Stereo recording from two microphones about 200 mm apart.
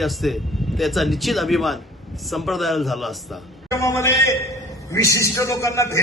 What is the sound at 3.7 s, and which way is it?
A man's voice, 15° left (ahead or behind).